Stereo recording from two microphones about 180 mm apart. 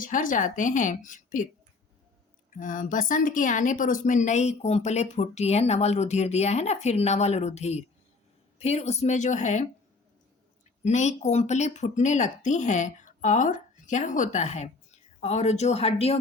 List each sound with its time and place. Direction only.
0.0 s a woman's voice: 50° left (ahead or behind)
2.5 s speech: 45° left (ahead or behind)
10.8 s speech: 40° left (ahead or behind)